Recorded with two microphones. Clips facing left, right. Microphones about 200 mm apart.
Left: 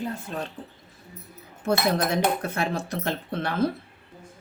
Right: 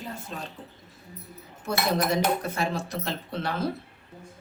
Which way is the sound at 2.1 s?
55° left (ahead or behind).